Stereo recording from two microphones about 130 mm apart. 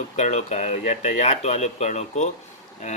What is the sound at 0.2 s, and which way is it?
Speech, 60° left (ahead or behind).